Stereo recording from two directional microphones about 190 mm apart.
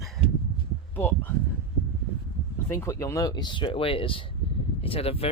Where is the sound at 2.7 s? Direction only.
15° left (ahead or behind).